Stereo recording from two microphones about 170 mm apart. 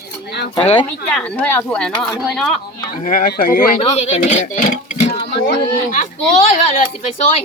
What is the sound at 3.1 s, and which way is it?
Speech, 55° left (ahead or behind).